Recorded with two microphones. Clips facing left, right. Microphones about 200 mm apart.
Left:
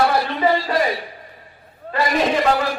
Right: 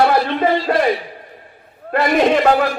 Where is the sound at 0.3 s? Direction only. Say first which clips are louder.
Right 3 dB; 55° right (ahead or behind).